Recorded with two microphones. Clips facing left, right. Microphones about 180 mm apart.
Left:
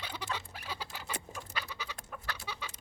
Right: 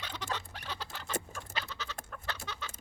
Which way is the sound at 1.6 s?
10° left (ahead or behind).